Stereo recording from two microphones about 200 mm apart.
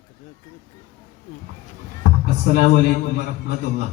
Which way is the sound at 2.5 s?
55° left (ahead or behind).